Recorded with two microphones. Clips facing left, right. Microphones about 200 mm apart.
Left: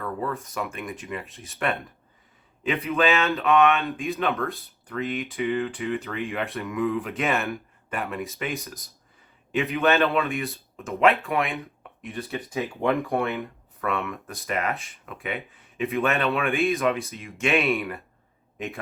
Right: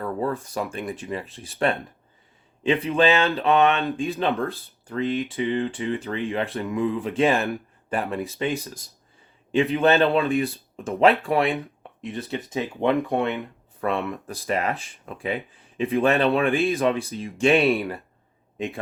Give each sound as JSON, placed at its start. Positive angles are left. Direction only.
{"t": 0.0, "sound": "speech", "side_deg": -30}
{"t": 2.8, "sound": "speech", "side_deg": -30}
{"t": 14.1, "sound": "a man's voice", "side_deg": -30}